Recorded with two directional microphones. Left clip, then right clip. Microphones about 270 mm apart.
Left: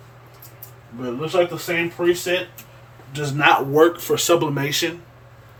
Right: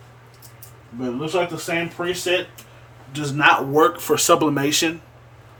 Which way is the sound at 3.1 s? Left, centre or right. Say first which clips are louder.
Even; centre.